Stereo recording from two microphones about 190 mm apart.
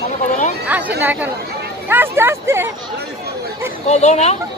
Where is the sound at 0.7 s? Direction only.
10° right (ahead or behind).